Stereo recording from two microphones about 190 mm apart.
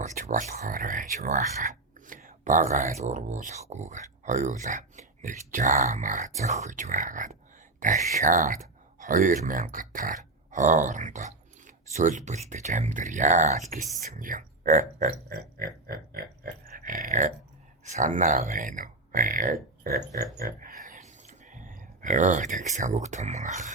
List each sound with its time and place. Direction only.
0.0 s speech: 40° right (ahead or behind)